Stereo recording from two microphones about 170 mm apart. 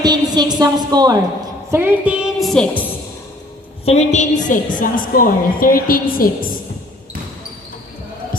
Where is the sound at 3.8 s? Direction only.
40° left (ahead or behind); by 6.5 s 55° left (ahead or behind).